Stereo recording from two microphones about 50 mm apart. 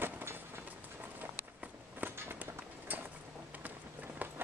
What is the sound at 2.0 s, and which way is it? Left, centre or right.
Walk, right.